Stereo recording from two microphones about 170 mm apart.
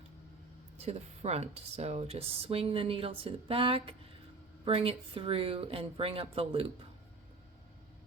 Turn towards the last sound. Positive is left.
turn(degrees=-35)  # may be behind; listen again after turning